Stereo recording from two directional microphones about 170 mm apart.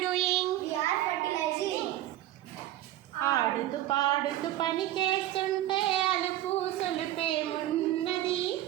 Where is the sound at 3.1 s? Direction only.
20° left (ahead or behind).